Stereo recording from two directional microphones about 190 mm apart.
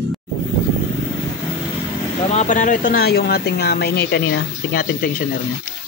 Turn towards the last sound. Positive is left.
turn(degrees=55)  # may be behind; listen again after turning